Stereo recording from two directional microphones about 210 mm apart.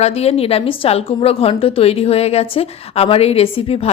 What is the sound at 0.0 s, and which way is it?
A woman's voice, 30° left (ahead or behind).